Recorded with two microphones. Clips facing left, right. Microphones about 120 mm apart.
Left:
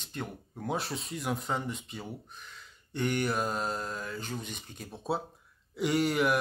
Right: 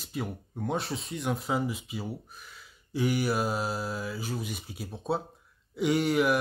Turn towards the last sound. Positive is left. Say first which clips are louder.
# right 2 dB
turn(degrees=0)  # may be behind; listen again after turning